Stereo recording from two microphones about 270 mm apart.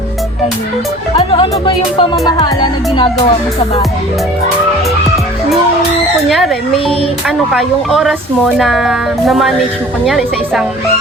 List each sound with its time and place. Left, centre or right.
1.1 s music: centre
6.2 s speech: centre